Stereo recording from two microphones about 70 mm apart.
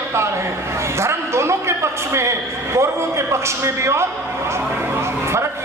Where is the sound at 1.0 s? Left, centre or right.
Right.